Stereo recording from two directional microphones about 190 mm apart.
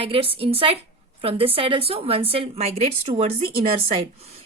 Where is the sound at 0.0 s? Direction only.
30° right (ahead or behind).